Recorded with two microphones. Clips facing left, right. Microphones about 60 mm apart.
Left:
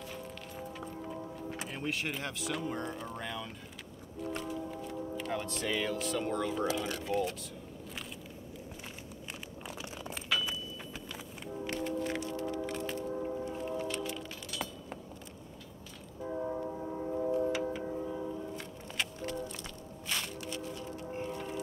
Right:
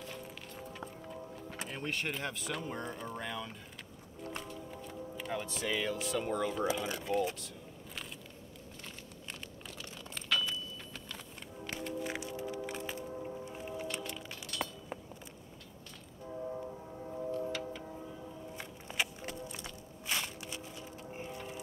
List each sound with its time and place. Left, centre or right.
0.0 s music: centre
1.5 s speech: centre
9.8 s a sound: centre
11.8 s music: centre
12.1 s a sound: centre
13.5 s music: centre
14.0 s music: centre
16.3 s train: left
16.5 s train: left
17.7 s tick-tock: left
18.9 s music: centre